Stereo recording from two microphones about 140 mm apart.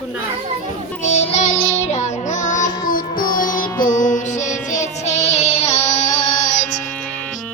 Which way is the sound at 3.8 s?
70° left (ahead or behind).